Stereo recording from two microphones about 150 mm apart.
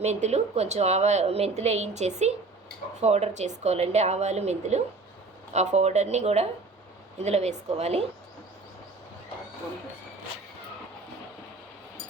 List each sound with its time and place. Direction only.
0.0 s a woman's voice: 50° right (ahead or behind)